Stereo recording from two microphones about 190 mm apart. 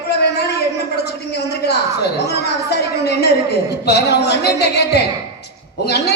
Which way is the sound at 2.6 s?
60° left (ahead or behind).